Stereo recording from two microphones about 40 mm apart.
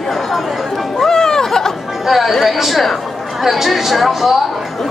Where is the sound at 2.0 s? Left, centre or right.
Centre.